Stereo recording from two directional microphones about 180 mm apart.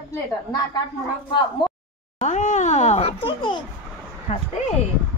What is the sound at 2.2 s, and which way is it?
A child's voice, 40° left (ahead or behind).